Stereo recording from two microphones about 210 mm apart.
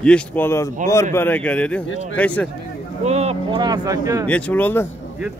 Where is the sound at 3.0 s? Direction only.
30° right (ahead or behind); by 4.3 s 15° right (ahead or behind).